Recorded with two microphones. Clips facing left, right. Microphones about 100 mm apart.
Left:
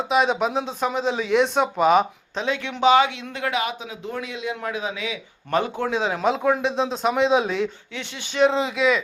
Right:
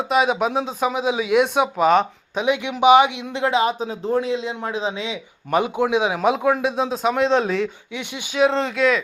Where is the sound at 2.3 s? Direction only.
15° right (ahead or behind).